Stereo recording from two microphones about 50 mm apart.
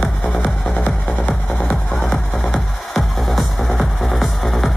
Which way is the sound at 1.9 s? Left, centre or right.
Centre.